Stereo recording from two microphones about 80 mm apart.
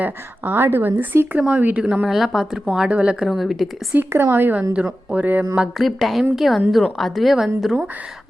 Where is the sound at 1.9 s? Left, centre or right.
Centre.